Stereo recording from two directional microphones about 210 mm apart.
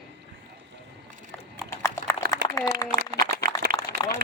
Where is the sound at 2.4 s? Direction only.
20° left (ahead or behind).